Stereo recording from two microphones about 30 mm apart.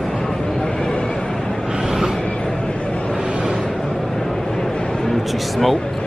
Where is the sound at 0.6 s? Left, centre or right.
Left.